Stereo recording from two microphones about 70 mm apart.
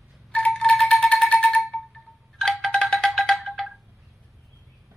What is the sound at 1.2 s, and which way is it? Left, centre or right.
Music, centre.